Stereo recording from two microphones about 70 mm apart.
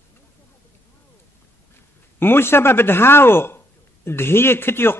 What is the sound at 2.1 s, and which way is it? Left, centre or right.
Speech, left.